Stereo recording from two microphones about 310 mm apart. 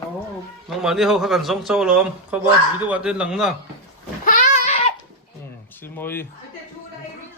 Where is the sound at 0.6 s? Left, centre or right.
Centre.